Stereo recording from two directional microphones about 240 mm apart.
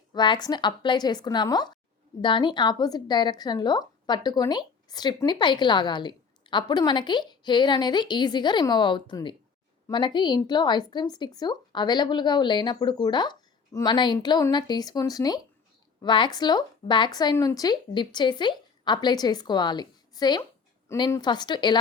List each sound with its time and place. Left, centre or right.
0.1 s a woman's voice: centre